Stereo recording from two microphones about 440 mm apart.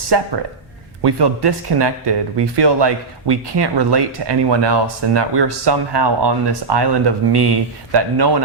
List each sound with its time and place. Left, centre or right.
0.1 s speech: right